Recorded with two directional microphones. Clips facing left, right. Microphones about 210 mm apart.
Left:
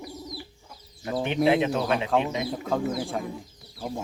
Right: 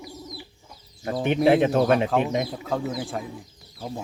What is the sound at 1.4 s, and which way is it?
Speech, 50° right (ahead or behind).